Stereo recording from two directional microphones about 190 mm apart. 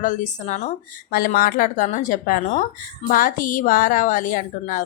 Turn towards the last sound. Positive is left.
turn(degrees=45)  # may be behind; listen again after turning